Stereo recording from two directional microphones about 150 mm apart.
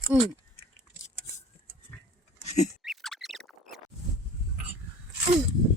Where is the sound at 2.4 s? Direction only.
50° left (ahead or behind).